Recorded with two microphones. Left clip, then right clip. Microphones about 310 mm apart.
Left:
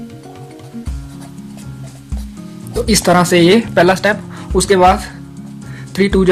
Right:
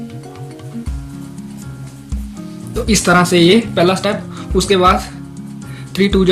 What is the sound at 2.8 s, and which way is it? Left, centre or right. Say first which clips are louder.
Speech: even; left.